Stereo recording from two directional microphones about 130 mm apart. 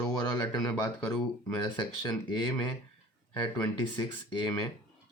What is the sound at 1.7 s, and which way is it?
Speech, 35° left (ahead or behind).